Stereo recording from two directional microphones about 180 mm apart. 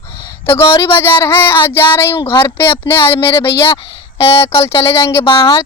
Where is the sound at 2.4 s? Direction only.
15° left (ahead or behind).